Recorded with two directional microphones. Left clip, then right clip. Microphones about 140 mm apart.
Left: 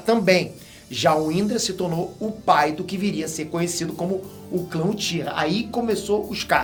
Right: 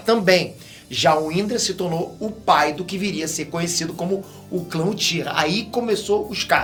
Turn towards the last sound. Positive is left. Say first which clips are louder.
# right 2 dB
turn(degrees=-5)  # may be behind; listen again after turning